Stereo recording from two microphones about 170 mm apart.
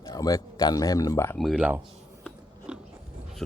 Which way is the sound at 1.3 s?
Centre (ahead or behind).